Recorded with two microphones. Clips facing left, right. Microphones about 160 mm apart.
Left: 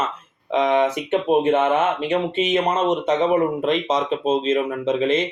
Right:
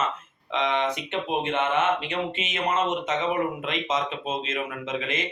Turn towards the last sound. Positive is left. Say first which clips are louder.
# left 11 dB
turn(degrees=35)  # may be behind; listen again after turning